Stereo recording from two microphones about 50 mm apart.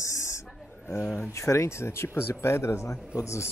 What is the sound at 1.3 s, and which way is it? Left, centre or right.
Speech, left.